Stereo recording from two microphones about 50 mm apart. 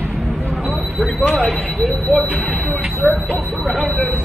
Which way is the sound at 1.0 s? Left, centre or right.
Centre.